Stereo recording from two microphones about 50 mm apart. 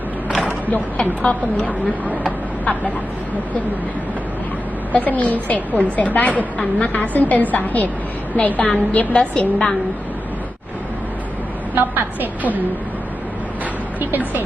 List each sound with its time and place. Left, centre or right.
1.2 s a woman's voice: left
4.9 s a woman's voice: left
11.7 s a woman's voice: right